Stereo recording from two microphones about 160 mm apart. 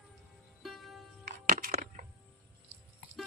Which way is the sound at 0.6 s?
Centre (ahead or behind).